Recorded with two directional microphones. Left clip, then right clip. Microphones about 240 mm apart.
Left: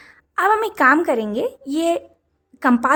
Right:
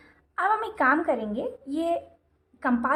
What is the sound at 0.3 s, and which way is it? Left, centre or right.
A woman's voice, left.